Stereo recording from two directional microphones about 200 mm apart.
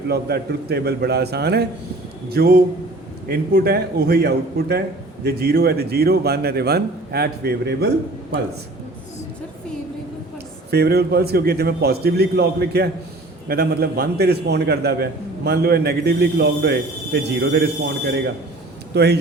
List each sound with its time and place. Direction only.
0.1 s a man's voice: 55° right (ahead or behind)
10.7 s a man's voice: 55° right (ahead or behind)
18.9 s speech: 55° right (ahead or behind)